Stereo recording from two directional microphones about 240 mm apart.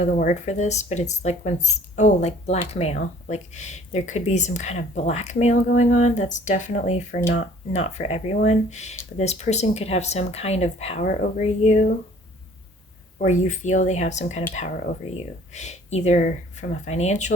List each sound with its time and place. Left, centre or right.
0.0 s speech: left
13.1 s speech: left